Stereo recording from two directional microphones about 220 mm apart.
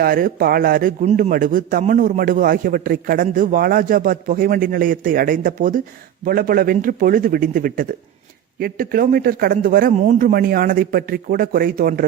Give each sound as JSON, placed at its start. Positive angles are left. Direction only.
{"t": 0.0, "sound": "a man's voice", "side_deg": -40}